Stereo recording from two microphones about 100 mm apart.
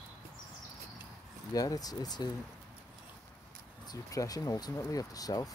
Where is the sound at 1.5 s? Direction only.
40° left (ahead or behind).